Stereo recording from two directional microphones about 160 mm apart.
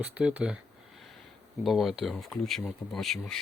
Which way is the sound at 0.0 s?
10° right (ahead or behind).